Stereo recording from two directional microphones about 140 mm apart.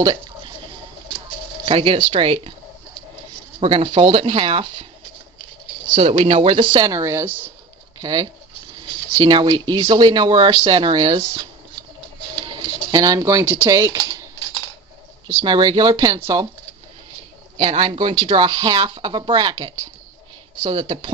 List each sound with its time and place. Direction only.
1.7 s speech: 40° right (ahead or behind)
3.5 s speech: 40° right (ahead or behind)
5.9 s speech: 40° right (ahead or behind); by 7.5 s 15° right (ahead or behind)
8.0 s speech: 30° right (ahead or behind)
12.4 s speech: 30° right (ahead or behind)
15.4 s speech: 30° right (ahead or behind)
17.6 s speech: 40° right (ahead or behind)